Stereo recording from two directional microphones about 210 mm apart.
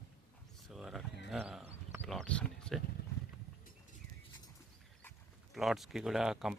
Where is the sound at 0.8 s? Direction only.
Centre (ahead or behind).